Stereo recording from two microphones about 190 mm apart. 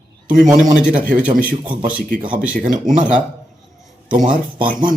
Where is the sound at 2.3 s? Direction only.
5° right (ahead or behind).